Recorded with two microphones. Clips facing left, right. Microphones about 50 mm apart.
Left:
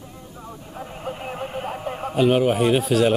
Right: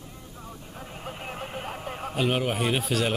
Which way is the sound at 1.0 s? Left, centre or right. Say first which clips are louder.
Left 6 dB; centre.